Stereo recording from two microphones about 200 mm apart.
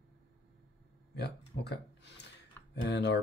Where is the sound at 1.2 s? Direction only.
55° left (ahead or behind).